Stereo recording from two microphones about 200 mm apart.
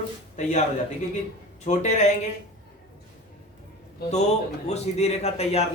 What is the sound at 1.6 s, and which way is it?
Speech, 35° left (ahead or behind).